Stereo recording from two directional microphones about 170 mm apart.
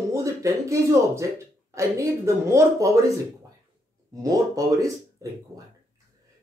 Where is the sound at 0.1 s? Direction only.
20° right (ahead or behind).